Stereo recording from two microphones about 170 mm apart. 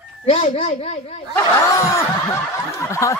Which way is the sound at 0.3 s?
45° left (ahead or behind).